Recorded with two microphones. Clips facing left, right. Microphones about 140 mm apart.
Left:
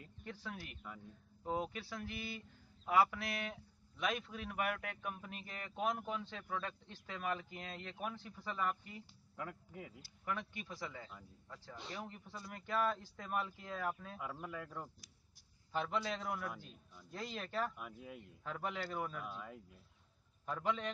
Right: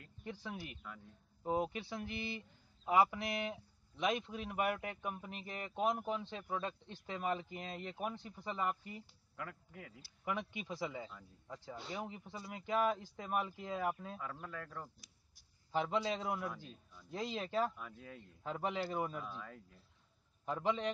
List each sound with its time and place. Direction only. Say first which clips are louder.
0.2 s speech: right 3 dB; 15° right (ahead or behind)
9.4 s speech: left 1 dB; 5° left (ahead or behind)
10.0 s speech: right 3 dB; 10° right (ahead or behind)
14.1 s speech: left 1 dB; 10° left (ahead or behind)
15.7 s speech: right 3 dB; 15° right (ahead or behind)
16.4 s a man's voice: right 2 dB; 10° left (ahead or behind)
17.1 s speech: right 5 dB; 10° right (ahead or behind)
17.7 s speech: left 1 dB; 10° left (ahead or behind)
18.4 s speech: right 4 dB; 20° right (ahead or behind)
19.2 s speech: even; 10° left (ahead or behind)
20.4 s speech: right 3 dB; 15° right (ahead or behind)